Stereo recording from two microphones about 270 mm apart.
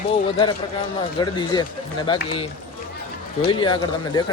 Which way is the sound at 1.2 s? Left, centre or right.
Centre.